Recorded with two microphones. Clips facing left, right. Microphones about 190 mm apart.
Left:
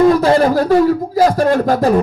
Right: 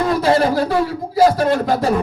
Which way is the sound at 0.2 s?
45° left (ahead or behind).